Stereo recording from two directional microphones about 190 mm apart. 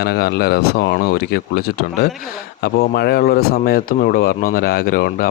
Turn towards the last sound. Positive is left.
turn(degrees=50)  # may be behind; listen again after turning